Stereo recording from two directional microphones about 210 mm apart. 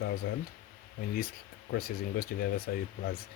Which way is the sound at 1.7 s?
45° left (ahead or behind).